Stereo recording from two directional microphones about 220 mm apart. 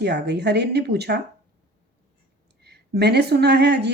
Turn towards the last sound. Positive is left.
turn(degrees=-45)  # may be behind; listen again after turning